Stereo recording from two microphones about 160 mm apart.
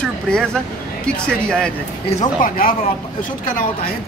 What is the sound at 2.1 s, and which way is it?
Speech, 50° left (ahead or behind).